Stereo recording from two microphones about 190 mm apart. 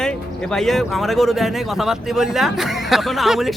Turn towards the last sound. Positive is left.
turn(degrees=0)  # may be behind; listen again after turning